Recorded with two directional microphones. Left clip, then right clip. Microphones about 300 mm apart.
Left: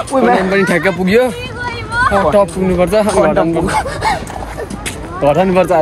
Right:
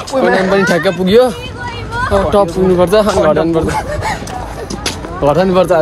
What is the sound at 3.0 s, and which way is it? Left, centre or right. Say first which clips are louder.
Speech: right 1 dB; centre.